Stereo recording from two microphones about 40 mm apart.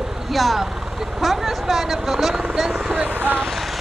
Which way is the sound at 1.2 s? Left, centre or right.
Centre.